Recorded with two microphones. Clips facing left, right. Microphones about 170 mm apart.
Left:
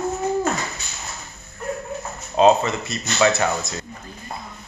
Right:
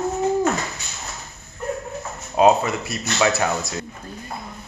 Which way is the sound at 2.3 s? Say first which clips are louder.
Even; 10° right (ahead or behind).